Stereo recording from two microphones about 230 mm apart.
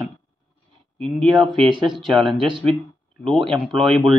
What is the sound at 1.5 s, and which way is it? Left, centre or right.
Speech, right.